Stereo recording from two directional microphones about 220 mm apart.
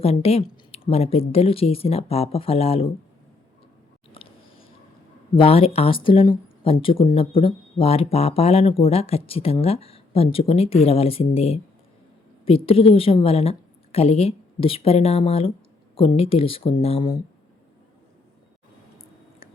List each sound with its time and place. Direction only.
0.0 s speech: 30° left (ahead or behind)
4.2 s a sound: 25° left (ahead or behind)
5.3 s speech: 25° left (ahead or behind)